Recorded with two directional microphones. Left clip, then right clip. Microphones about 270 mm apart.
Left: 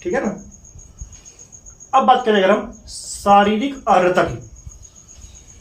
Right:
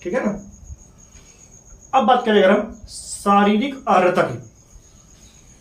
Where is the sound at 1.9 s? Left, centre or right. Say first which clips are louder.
Left 2 dB; centre.